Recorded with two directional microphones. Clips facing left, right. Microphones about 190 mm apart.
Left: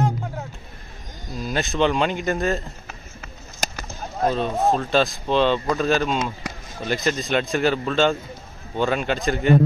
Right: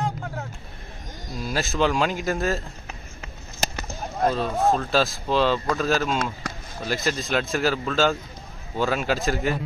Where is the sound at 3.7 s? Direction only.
10° left (ahead or behind).